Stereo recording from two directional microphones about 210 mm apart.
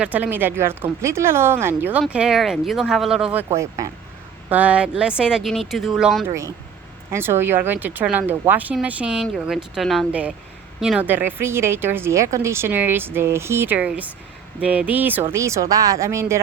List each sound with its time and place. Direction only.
0.0 s speech: 5° right (ahead or behind)
6.2 s speech: 15° right (ahead or behind)